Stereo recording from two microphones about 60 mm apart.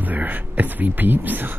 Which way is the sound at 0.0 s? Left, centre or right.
Right.